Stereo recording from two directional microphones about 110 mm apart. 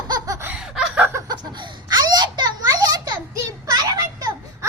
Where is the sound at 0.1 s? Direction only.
30° right (ahead or behind).